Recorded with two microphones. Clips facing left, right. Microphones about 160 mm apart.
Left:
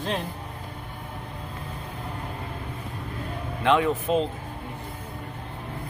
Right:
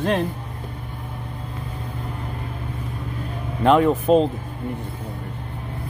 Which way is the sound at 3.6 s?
40° right (ahead or behind).